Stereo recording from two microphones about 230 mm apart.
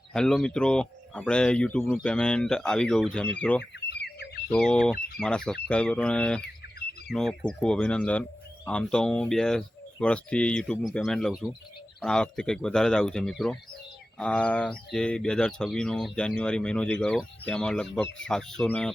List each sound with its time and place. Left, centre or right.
0.1 s speech: centre
3.6 s a sound: left
4.4 s speech: centre